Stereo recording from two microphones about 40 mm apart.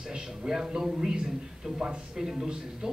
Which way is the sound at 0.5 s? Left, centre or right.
Centre.